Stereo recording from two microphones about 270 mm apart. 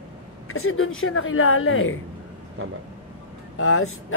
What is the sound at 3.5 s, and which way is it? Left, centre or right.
Speech, left.